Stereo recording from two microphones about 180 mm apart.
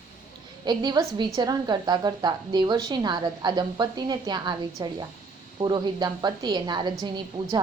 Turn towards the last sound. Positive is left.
turn(degrees=-25)  # may be behind; listen again after turning